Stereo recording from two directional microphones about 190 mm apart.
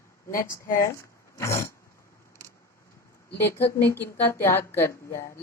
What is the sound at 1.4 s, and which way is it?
Speech, 15° left (ahead or behind).